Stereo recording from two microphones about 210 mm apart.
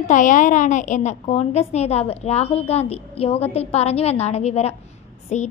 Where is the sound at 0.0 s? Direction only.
35° left (ahead or behind).